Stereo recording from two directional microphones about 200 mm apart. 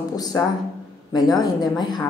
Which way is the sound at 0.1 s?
20° left (ahead or behind).